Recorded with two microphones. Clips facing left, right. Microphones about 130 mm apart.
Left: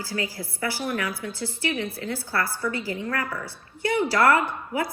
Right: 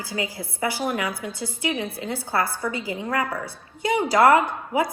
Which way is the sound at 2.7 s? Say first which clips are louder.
Right 3 dB; 20° right (ahead or behind).